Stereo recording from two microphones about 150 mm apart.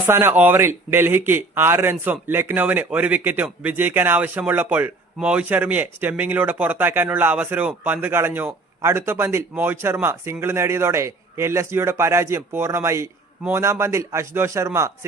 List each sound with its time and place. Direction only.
0.0 s a man's voice: 15° right (ahead or behind)